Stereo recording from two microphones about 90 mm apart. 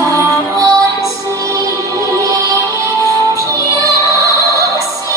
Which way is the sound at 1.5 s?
35° right (ahead or behind).